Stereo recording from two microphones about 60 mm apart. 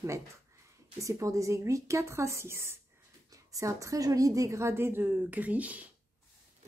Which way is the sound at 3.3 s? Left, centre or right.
Right.